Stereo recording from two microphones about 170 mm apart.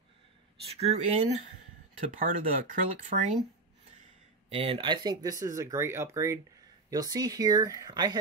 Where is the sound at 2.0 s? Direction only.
50° right (ahead or behind).